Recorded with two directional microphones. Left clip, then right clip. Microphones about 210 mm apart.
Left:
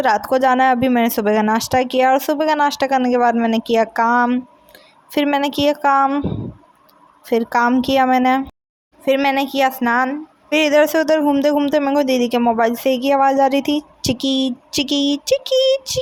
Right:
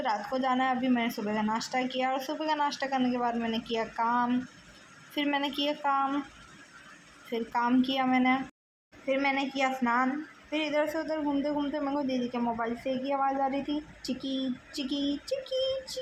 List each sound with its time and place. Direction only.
0.0 s a woman's voice: 55° left (ahead or behind)
7.3 s speech: 55° left (ahead or behind)